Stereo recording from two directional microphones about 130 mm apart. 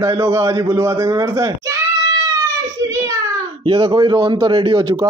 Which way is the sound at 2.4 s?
25° right (ahead or behind).